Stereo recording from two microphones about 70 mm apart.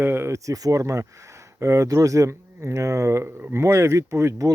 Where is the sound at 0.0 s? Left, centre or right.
Right.